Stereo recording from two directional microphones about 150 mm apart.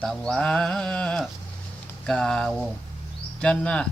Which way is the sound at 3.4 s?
5° left (ahead or behind).